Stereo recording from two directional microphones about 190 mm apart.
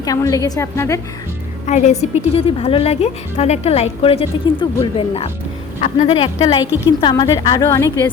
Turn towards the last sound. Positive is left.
turn(degrees=15)  # may be behind; listen again after turning